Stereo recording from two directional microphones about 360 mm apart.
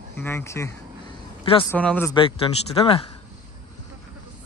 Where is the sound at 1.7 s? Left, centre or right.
Centre.